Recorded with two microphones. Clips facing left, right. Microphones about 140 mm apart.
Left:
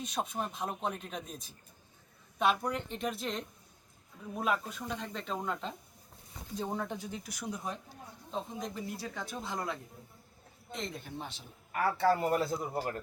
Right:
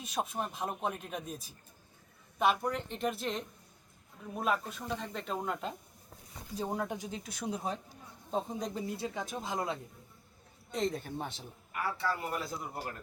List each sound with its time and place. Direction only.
0.0 s speech: 5° right (ahead or behind); by 8.8 s 35° right (ahead or behind)
9.0 s speech: 20° right (ahead or behind)
10.7 s speech: 40° right (ahead or behind)
11.7 s speech: 45° left (ahead or behind)